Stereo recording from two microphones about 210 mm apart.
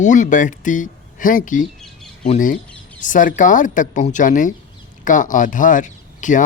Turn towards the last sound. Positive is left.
turn(degrees=35)  # may be behind; listen again after turning